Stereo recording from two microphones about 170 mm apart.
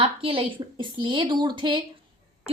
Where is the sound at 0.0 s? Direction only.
35° right (ahead or behind).